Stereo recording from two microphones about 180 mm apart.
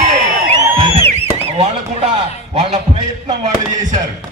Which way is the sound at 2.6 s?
30° right (ahead or behind).